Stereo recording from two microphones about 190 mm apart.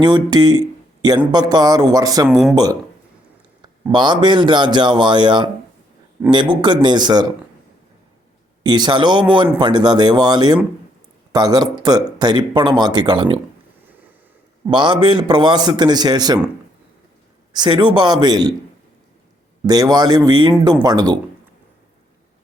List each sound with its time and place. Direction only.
0.0 s speech: 20° right (ahead or behind)
2.3 s speech: centre (ahead or behind)
3.9 s speech: 25° right (ahead or behind)
8.6 s speech: 20° right (ahead or behind)
14.7 s speech: 25° right (ahead or behind)
17.5 s speech: 25° right (ahead or behind)
19.6 s speech: 20° right (ahead or behind)